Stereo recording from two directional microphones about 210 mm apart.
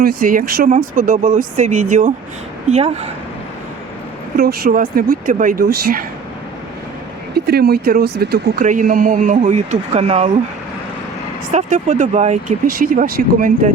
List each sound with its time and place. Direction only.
0.0 s speech: 45° right (ahead or behind)
4.4 s speech: 45° right (ahead or behind)
7.3 s speech: 50° right (ahead or behind); by 10.3 s 30° right (ahead or behind)
11.5 s speech: 35° right (ahead or behind)